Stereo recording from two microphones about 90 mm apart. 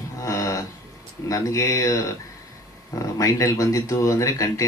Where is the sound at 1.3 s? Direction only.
40° left (ahead or behind).